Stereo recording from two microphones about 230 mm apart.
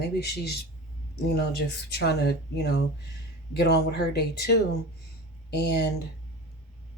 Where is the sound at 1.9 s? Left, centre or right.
Left.